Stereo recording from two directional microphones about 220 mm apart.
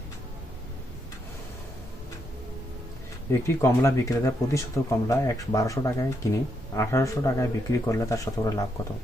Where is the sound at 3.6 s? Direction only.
15° left (ahead or behind).